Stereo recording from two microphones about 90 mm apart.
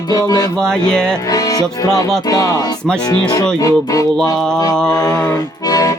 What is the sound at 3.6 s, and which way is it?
Speech, 40° left (ahead or behind).